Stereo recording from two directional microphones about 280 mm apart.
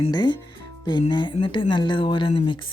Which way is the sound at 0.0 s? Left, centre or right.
Centre.